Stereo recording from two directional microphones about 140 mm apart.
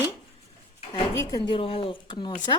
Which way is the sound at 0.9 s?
30° left (ahead or behind).